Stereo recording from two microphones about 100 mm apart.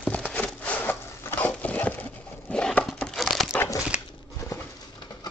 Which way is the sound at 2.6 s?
10° left (ahead or behind).